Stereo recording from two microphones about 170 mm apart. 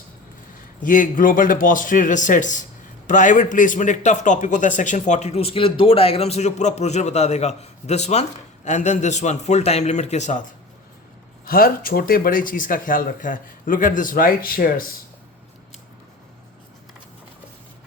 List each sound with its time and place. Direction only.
0.8 s a man's voice: 50° left (ahead or behind)
11.4 s speech: 60° left (ahead or behind)